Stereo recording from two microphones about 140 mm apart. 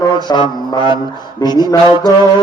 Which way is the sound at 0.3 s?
30° left (ahead or behind).